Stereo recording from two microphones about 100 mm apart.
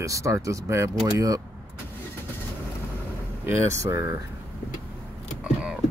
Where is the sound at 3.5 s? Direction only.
30° right (ahead or behind).